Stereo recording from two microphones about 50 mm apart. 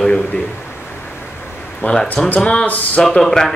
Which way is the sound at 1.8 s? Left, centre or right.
Left.